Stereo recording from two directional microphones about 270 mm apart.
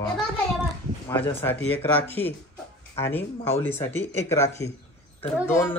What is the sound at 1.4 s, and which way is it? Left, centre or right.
A man's voice, centre.